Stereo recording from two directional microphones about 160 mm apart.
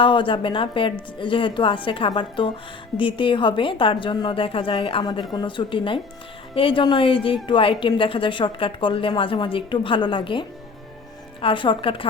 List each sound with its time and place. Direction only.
0.0 s a woman's voice: 30° left (ahead or behind)